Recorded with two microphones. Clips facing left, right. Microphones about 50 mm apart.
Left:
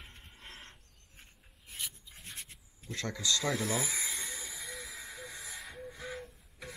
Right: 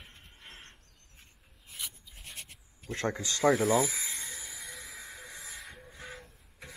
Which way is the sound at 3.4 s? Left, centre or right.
Right.